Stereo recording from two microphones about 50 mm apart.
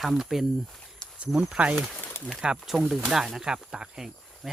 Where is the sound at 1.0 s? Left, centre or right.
Centre.